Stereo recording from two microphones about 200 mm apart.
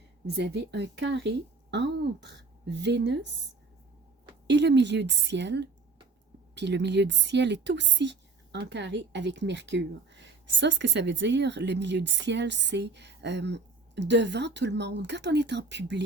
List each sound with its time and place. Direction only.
0.3 s a woman's voice: 55° right (ahead or behind)
4.4 s a woman's voice: 60° right (ahead or behind)